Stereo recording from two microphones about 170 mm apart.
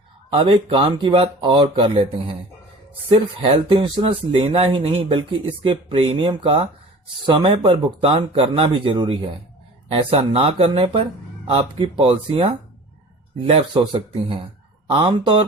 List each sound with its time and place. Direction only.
0.3 s speech: 30° right (ahead or behind)